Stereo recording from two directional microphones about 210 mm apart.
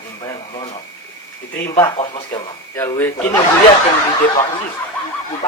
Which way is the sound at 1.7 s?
20° left (ahead or behind).